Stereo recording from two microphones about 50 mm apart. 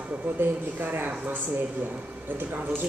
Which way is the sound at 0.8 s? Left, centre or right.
Right.